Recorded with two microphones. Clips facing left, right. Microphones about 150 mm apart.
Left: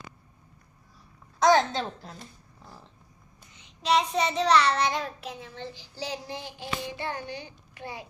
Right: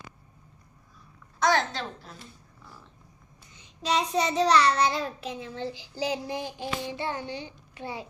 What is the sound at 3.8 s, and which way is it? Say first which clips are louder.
Child singing: left 1 dB; 40° right (ahead or behind).